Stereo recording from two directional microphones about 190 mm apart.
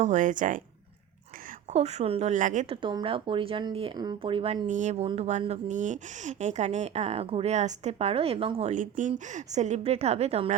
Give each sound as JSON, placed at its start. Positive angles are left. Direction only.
{"t": 0.0, "sound": "speech", "side_deg": -40}
{"t": 1.7, "sound": "speech", "side_deg": -35}
{"t": 2.8, "sound": "speech", "side_deg": -25}
{"t": 4.6, "sound": "speech", "side_deg": -40}